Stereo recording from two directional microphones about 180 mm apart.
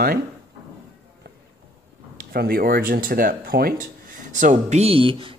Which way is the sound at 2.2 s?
55° right (ahead or behind).